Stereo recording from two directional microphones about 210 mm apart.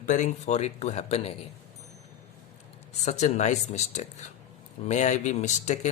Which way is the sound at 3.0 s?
35° left (ahead or behind).